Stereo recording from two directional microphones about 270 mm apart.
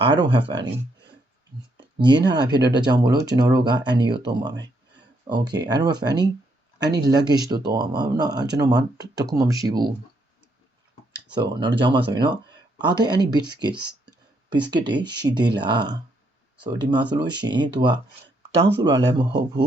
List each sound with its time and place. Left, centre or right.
0.0 s speech: centre
2.0 s speech: centre
11.3 s speech: centre